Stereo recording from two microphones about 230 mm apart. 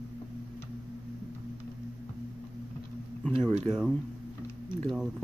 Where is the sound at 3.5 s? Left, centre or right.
Right.